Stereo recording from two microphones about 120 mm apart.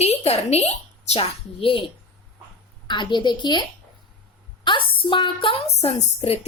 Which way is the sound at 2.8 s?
40° left (ahead or behind).